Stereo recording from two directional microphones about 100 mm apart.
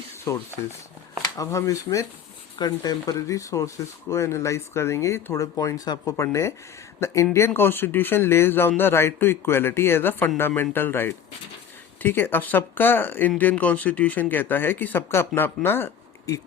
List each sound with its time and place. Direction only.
0.3 s speech: 30° left (ahead or behind)
6.1 s speech: 30° left (ahead or behind)